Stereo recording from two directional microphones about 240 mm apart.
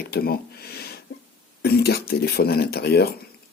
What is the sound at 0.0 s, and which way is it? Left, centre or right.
Speech, left.